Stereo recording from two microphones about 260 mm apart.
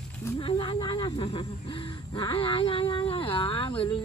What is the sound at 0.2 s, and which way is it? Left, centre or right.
Speech, centre.